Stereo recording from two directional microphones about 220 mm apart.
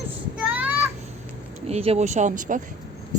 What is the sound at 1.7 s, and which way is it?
Speech, 30° right (ahead or behind).